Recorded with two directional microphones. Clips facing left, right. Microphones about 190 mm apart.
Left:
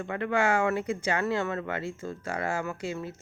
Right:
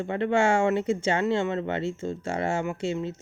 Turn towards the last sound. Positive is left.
turn(degrees=-25)  # may be behind; listen again after turning